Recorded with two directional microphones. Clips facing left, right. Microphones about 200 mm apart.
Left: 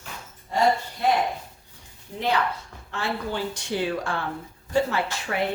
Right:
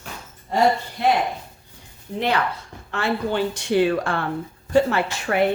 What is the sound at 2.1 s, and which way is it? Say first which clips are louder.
A woman's voice: right 2 dB; 70° right (ahead or behind).